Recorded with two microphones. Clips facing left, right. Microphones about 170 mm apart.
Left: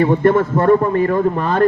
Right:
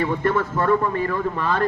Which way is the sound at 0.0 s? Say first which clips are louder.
Left 8 dB; 45° left (ahead or behind).